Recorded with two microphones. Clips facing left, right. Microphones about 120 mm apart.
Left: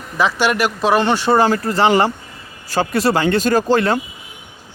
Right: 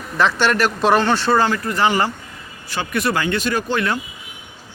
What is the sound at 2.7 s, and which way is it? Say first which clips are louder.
Speech: left 5 dB; 35° left (ahead or behind).